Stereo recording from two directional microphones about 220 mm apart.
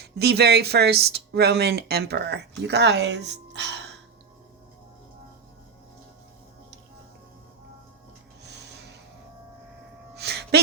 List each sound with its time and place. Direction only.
0.0 s speech: 45° right (ahead or behind)
8.4 s a sound: 50° right (ahead or behind)
10.2 s music: 50° right (ahead or behind)